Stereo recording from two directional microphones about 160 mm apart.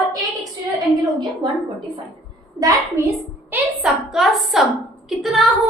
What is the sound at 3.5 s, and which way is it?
A woman's voice, 5° right (ahead or behind).